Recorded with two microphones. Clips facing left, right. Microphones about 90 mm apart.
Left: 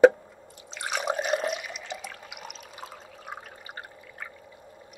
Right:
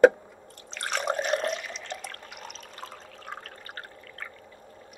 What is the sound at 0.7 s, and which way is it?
Water, 5° left (ahead or behind).